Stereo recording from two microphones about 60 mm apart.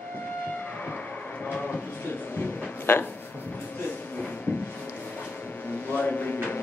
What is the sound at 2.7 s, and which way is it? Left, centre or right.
Music, left.